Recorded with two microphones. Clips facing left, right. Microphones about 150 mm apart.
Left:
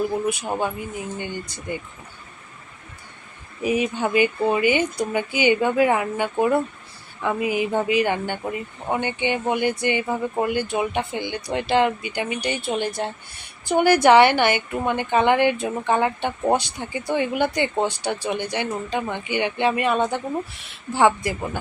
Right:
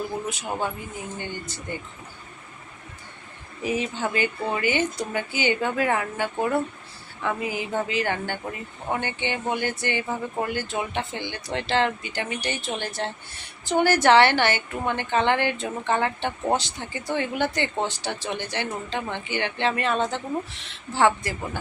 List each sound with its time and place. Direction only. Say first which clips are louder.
0.3 s a woman's voice: left 4 dB; 15° left (ahead or behind)
3.6 s a woman's voice: left 4 dB; 15° left (ahead or behind)